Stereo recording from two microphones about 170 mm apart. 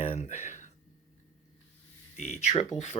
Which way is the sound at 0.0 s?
40° left (ahead or behind).